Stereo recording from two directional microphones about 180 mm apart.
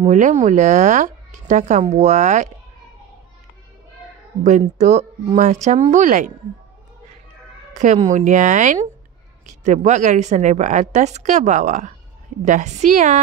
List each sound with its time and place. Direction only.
0.1 s speech: 40° right (ahead or behind)
4.4 s a woman's voice: 40° right (ahead or behind)
7.7 s a woman's voice: 45° right (ahead or behind)